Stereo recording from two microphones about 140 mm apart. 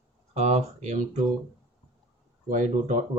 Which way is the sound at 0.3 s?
55° right (ahead or behind).